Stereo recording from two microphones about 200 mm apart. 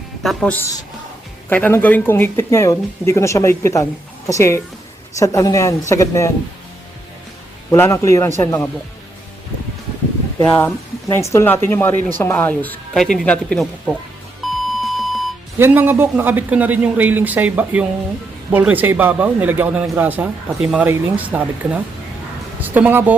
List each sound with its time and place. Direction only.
0.2 s speech: centre (ahead or behind)
7.7 s speech: 15° left (ahead or behind)
10.4 s speech: 10° left (ahead or behind)
14.4 s beep: centre (ahead or behind)
15.5 s speech: 10° right (ahead or behind)